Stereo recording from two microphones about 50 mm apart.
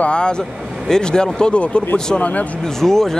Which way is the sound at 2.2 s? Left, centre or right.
Left.